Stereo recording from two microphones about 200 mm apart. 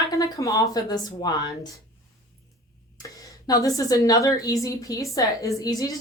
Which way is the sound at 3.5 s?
15° left (ahead or behind).